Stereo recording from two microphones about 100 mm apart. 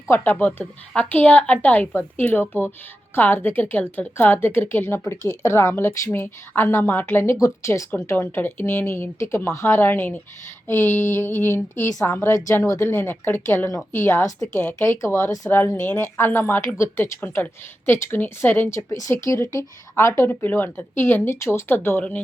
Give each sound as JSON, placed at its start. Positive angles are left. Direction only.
{"t": 0.1, "sound": "a woman's voice", "side_deg": 20}